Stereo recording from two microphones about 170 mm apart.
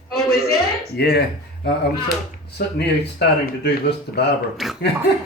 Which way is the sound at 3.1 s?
75° left (ahead or behind).